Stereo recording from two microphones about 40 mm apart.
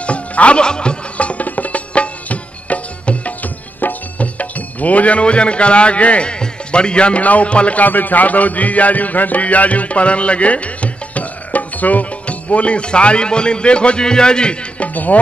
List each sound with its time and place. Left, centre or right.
0.0 s music: left
1.1 s music: left
7.2 s speech: left
7.8 s music: left
15.1 s speech: left